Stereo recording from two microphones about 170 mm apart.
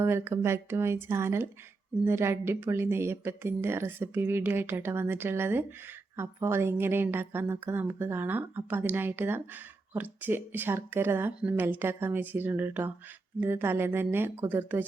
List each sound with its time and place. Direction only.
0.0 s speech: 15° right (ahead or behind)